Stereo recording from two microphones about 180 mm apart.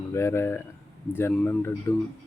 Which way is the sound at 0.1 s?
15° left (ahead or behind).